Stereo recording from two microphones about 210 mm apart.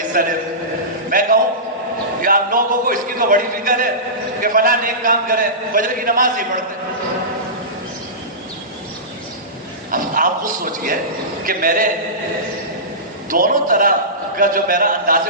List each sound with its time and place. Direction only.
0.1 s a man's voice: 45° right (ahead or behind)
9.9 s a man's voice: 40° right (ahead or behind)
13.3 s a man's voice: 40° right (ahead or behind)